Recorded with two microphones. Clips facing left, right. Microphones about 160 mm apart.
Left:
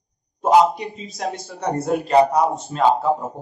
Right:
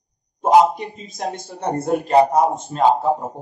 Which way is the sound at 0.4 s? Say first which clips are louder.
Right 1 dB; 50° right (ahead or behind).